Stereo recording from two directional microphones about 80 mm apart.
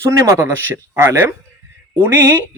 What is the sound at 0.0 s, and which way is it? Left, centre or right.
A man's voice, right.